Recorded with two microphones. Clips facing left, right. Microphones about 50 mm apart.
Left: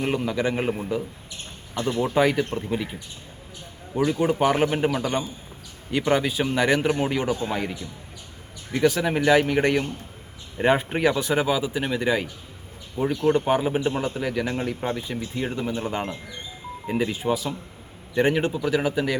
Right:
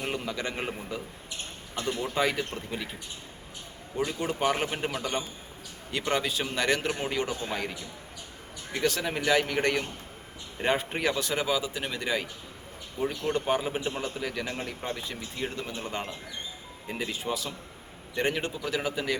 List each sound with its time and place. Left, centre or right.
0.0 s a man's voice: centre
1.8 s speech: left
2.1 s a man's voice: centre
4.1 s a man's voice: centre
6.0 s a man's voice: centre